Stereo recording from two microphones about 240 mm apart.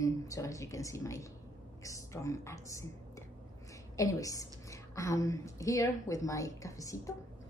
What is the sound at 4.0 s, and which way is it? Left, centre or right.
A woman's voice, centre.